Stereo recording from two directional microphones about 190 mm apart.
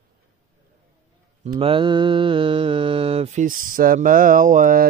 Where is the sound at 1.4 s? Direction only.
30° right (ahead or behind); by 4.9 s 45° right (ahead or behind).